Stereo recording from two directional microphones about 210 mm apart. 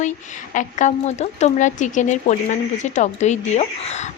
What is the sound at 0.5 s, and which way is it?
A woman's voice, 35° left (ahead or behind).